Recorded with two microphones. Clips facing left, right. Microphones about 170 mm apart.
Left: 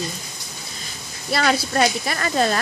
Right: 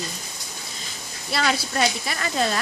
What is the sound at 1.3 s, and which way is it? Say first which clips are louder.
Speech: left 4 dB; 50° left (ahead or behind).